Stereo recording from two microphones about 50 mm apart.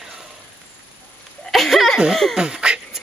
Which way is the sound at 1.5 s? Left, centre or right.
Centre.